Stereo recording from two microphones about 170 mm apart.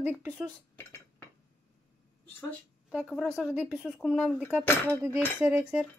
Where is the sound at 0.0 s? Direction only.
10° right (ahead or behind).